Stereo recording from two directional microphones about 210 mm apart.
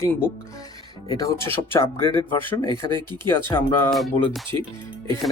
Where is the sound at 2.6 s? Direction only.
20° right (ahead or behind).